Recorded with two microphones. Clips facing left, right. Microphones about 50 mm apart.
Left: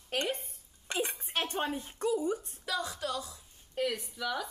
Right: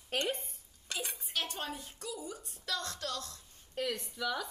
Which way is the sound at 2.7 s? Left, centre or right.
Centre.